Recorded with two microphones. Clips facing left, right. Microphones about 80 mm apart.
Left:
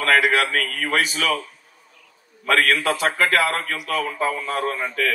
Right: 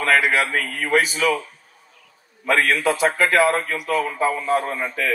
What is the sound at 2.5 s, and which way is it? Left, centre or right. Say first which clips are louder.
A man's voice: even; right.